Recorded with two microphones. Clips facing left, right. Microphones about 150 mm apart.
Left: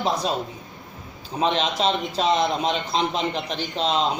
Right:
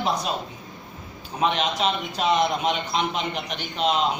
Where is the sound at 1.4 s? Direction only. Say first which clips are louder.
Left 1 dB; 30° left (ahead or behind).